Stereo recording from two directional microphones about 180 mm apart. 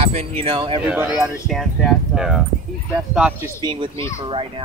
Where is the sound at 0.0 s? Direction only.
40° right (ahead or behind).